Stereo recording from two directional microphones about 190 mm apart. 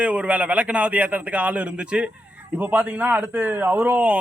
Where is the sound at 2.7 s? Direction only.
10° right (ahead or behind).